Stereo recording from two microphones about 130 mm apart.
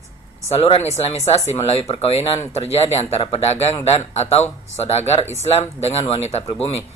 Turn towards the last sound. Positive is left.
turn(degrees=55)  # may be behind; listen again after turning